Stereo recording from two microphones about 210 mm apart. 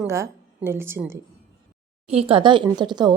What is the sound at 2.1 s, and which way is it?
Speech, 25° right (ahead or behind).